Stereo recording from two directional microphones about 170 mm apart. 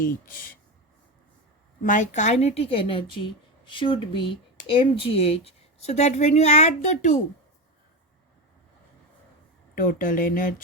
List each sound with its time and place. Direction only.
1.8 s a woman's voice: 50° left (ahead or behind)
9.7 s speech: 55° left (ahead or behind)